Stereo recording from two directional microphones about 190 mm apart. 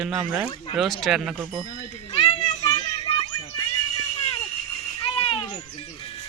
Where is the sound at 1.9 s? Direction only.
30° left (ahead or behind).